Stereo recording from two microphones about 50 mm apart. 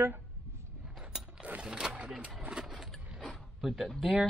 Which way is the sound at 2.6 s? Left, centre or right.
Centre.